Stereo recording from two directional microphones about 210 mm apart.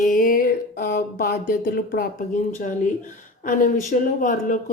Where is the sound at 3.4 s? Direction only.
40° left (ahead or behind).